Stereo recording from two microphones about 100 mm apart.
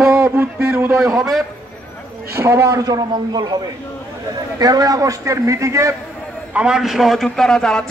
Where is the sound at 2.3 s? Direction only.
30° right (ahead or behind).